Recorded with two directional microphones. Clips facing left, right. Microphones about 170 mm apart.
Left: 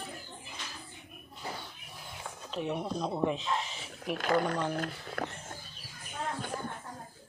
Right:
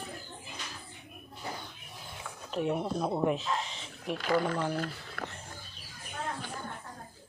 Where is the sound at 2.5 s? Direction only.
5° right (ahead or behind).